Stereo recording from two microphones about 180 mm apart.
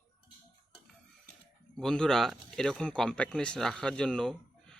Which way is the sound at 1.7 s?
5° left (ahead or behind).